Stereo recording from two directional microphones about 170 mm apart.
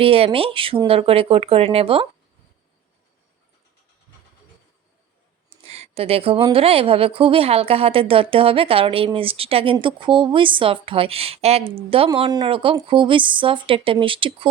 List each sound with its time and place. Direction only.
0.0 s speech: 35° right (ahead or behind)
5.5 s speech: 40° right (ahead or behind)